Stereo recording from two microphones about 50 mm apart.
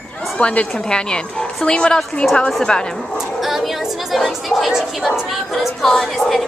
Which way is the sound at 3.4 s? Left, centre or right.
Centre.